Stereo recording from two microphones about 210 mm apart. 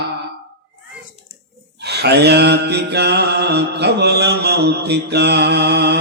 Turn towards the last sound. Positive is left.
turn(degrees=-50)  # may be behind; listen again after turning